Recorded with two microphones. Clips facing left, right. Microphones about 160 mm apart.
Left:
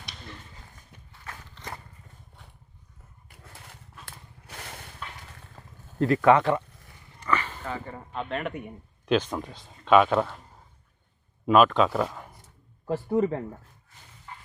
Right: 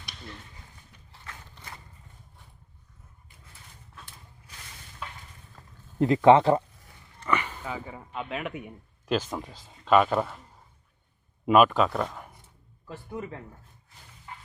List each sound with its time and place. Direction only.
3.2 s vehicle: 75° left (ahead or behind)
4.0 s a sound: 70° left (ahead or behind)
6.0 s speech: 25° right (ahead or behind)
7.3 s speech: 15° right (ahead or behind)
11.4 s speech: 10° right (ahead or behind)
12.9 s speech: 40° left (ahead or behind)